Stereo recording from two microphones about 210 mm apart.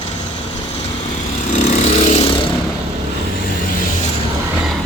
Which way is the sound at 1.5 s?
35° left (ahead or behind).